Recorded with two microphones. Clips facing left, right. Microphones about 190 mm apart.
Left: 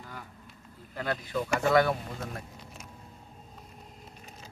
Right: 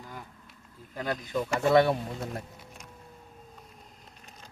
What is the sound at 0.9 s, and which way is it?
Speech, 15° right (ahead or behind).